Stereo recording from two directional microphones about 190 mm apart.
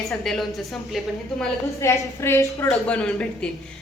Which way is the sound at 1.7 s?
15° left (ahead or behind).